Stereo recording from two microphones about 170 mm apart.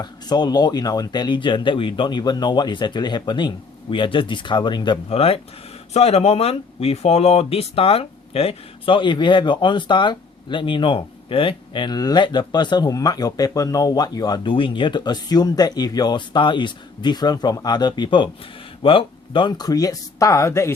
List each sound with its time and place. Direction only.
0.0 s speech: 25° left (ahead or behind)